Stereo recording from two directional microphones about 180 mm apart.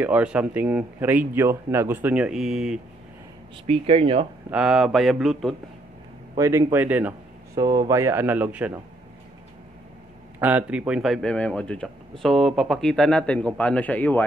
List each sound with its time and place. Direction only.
0.0 s speech: 5° right (ahead or behind)
3.6 s speech: 35° right (ahead or behind)
4.5 s a man's voice: 5° right (ahead or behind)
6.3 s a man's voice: 15° right (ahead or behind)
7.5 s speech: 20° right (ahead or behind)
10.4 s a man's voice: 10° right (ahead or behind); by 14.2 s 10° left (ahead or behind)